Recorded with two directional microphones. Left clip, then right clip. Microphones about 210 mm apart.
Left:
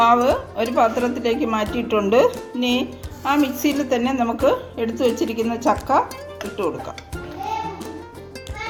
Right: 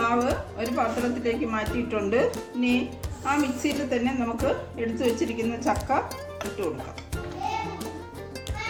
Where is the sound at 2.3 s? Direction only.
5° left (ahead or behind).